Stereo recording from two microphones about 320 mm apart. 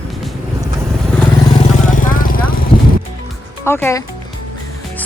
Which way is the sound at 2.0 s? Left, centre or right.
Left.